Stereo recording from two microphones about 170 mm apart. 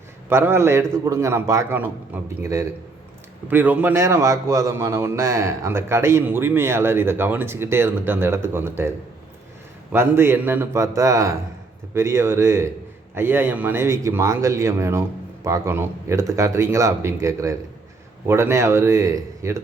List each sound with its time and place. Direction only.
0.3 s a man's voice: 15° right (ahead or behind)
9.9 s a man's voice: 15° right (ahead or behind)